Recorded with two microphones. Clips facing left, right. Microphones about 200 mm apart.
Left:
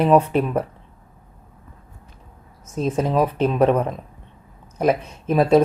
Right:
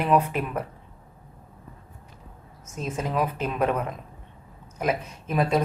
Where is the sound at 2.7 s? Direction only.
35° left (ahead or behind).